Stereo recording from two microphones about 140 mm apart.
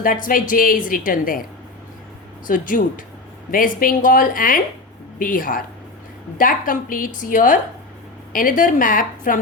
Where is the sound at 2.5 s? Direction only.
75° left (ahead or behind).